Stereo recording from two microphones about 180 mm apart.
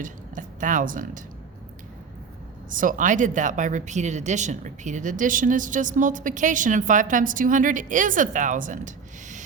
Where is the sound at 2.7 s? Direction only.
50° right (ahead or behind).